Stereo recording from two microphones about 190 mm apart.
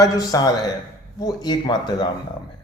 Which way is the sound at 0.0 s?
20° left (ahead or behind).